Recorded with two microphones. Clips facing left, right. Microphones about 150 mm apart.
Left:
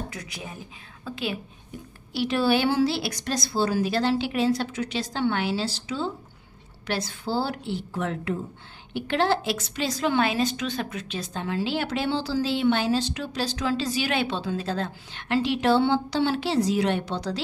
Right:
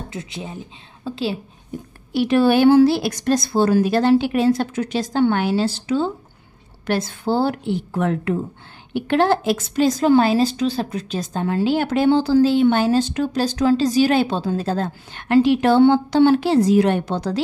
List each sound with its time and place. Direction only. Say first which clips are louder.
0.1 s speech: right 7 dB; 25° right (ahead or behind)
2.1 s a woman's voice: right 7 dB; 55° right (ahead or behind)